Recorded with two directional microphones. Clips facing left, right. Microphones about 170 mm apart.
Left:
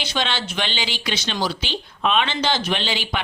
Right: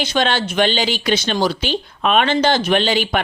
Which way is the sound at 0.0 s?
50° right (ahead or behind).